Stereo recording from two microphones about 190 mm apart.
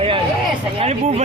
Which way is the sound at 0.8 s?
35° right (ahead or behind).